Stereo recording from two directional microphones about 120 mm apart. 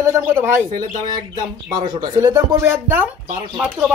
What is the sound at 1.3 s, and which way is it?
Speech, 30° right (ahead or behind).